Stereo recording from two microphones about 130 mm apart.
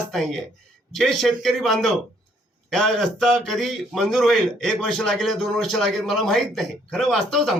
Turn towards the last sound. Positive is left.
turn(degrees=0)  # may be behind; listen again after turning